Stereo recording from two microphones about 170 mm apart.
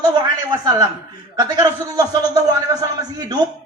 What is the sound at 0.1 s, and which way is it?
A man's voice, 25° right (ahead or behind).